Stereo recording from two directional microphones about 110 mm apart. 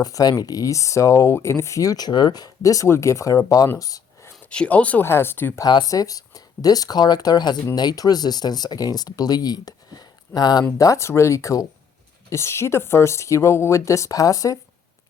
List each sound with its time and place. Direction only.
0.0 s speech: 35° left (ahead or behind)
3.8 s a sound: 30° left (ahead or behind)
4.4 s speech: 10° left (ahead or behind)
5.5 s speech: 35° left (ahead or behind)